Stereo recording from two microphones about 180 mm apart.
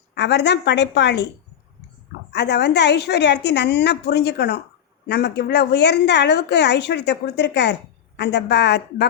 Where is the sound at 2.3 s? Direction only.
70° left (ahead or behind).